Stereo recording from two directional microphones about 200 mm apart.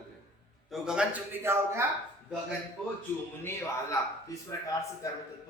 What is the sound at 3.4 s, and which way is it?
A man's voice, 15° left (ahead or behind).